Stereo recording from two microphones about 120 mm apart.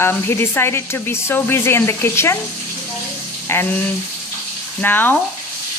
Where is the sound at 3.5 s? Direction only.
15° left (ahead or behind).